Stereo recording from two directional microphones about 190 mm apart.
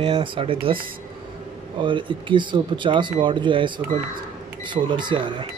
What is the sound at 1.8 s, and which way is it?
Speech, 25° right (ahead or behind).